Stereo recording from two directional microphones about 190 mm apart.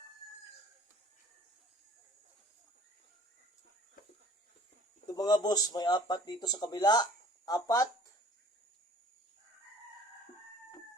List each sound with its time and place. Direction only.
5.0 s speech: 20° left (ahead or behind)